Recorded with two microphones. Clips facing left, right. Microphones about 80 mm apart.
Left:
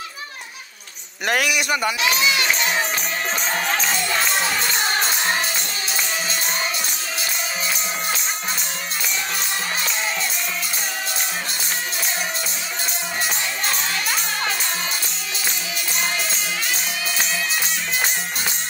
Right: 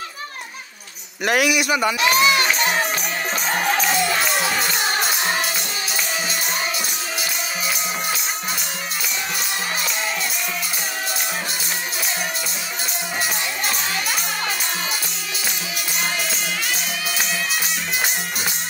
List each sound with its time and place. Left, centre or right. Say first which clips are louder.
1.2 s a man's voice: right 2 dB; centre
2.0 s speech: right 4 dB; right